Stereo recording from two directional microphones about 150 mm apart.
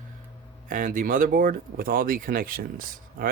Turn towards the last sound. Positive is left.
turn(degrees=-75)  # may be behind; listen again after turning